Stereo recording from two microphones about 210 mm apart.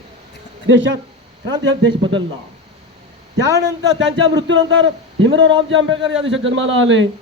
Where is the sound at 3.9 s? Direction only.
60° right (ahead or behind).